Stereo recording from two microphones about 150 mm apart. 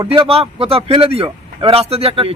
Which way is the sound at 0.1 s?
40° right (ahead or behind).